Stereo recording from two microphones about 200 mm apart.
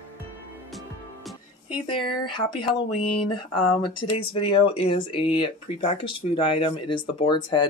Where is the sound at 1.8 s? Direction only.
25° left (ahead or behind).